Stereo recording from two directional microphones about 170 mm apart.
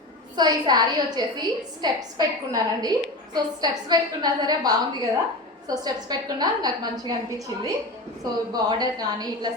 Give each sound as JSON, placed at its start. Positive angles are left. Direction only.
{"t": 0.3, "sound": "a woman's voice", "side_deg": -25}